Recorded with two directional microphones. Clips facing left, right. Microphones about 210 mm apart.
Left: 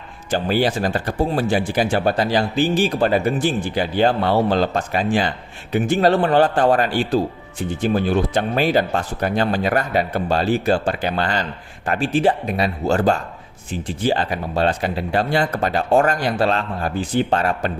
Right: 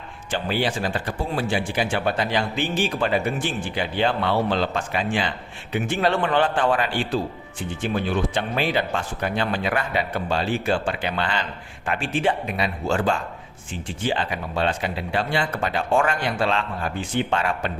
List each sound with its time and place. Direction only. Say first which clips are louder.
0.3 s speech: left 5 dB; 40° left (ahead or behind)